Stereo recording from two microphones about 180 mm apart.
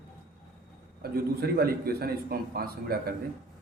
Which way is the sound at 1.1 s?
55° right (ahead or behind).